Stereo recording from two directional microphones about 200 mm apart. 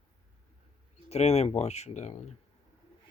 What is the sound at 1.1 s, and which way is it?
Speech, 30° left (ahead or behind).